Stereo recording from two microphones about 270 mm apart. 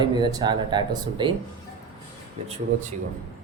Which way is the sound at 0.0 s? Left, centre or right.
Centre.